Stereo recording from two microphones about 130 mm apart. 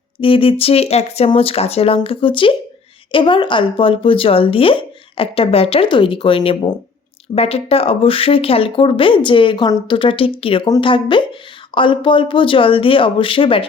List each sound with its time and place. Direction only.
0.2 s speech: 45° left (ahead or behind)